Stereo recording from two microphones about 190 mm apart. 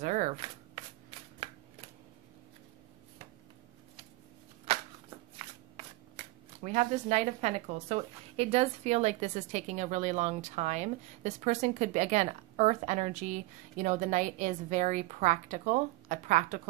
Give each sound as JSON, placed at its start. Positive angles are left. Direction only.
{"t": 0.0, "sound": "shuffling cards", "side_deg": -40}
{"t": 6.6, "sound": "speech", "side_deg": -40}